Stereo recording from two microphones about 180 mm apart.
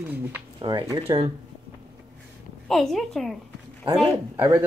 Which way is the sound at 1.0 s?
35° right (ahead or behind).